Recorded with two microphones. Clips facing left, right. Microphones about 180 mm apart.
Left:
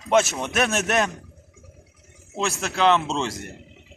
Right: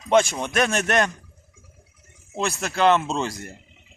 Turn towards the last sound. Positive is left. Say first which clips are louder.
# even
turn(degrees=0)  # may be behind; listen again after turning